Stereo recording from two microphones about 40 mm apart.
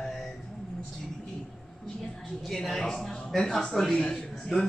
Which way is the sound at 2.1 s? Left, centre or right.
Centre.